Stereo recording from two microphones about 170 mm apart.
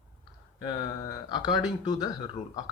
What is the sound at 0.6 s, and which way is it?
Speech, 25° left (ahead or behind).